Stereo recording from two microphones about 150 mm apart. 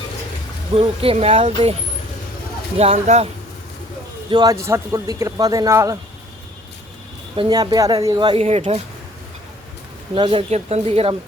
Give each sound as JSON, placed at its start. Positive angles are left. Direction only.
{"t": 0.8, "sound": "speech", "side_deg": -40}
{"t": 2.7, "sound": "speech", "side_deg": -45}
{"t": 4.3, "sound": "speech", "side_deg": -30}
{"t": 7.3, "sound": "speech", "side_deg": -30}
{"t": 10.2, "sound": "speech", "side_deg": -35}